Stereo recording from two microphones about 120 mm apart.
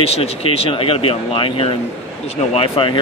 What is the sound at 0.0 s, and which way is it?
Speech, 55° left (ahead or behind).